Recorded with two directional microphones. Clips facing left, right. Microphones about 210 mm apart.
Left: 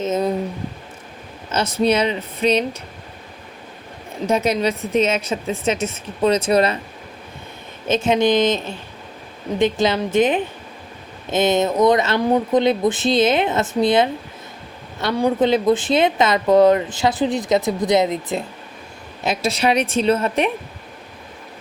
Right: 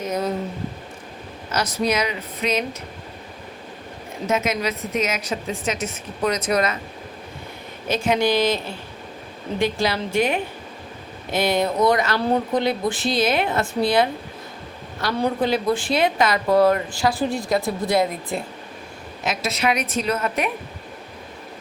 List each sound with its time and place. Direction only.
0.0 s speech: 20° left (ahead or behind)
1.5 s speech: 25° left (ahead or behind)
4.3 s speech: 35° left (ahead or behind)
7.9 s speech: 25° left (ahead or behind)
8.4 s speech: 10° right (ahead or behind)
9.6 s speech: 20° left (ahead or behind)
15.1 s speech: 15° left (ahead or behind)